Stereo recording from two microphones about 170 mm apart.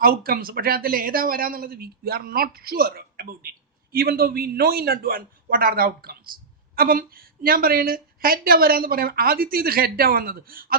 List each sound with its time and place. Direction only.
0.0 s a woman's voice: 60° right (ahead or behind)